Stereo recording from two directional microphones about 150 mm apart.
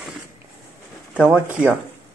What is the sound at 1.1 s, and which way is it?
Speech, 10° right (ahead or behind).